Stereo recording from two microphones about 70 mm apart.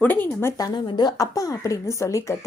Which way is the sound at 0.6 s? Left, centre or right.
Left.